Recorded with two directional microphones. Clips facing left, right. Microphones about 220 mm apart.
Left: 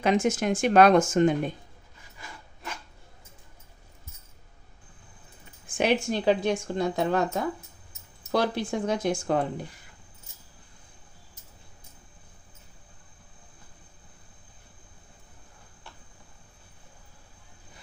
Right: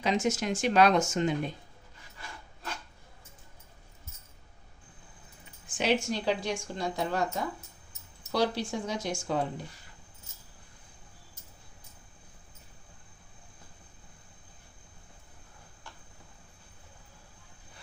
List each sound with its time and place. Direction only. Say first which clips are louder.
0.0 s speech: left 5 dB; 55° left (ahead or behind)
5.7 s a woman's voice: left 4 dB; 55° left (ahead or behind)